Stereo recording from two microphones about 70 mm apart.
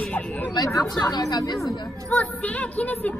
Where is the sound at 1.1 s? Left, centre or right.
Left.